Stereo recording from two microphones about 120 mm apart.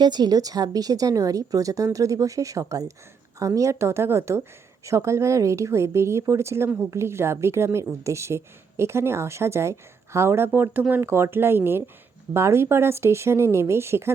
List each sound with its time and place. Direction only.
0.0 s speech: 35° right (ahead or behind)